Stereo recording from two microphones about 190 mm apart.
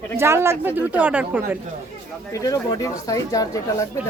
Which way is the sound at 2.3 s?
15° left (ahead or behind).